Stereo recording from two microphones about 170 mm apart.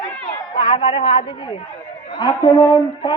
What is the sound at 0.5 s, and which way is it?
A woman's voice, 30° left (ahead or behind).